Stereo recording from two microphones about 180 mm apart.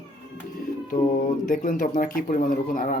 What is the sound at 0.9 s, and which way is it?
Speech, 45° left (ahead or behind).